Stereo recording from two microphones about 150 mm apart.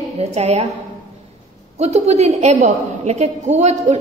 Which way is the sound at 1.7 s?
45° right (ahead or behind).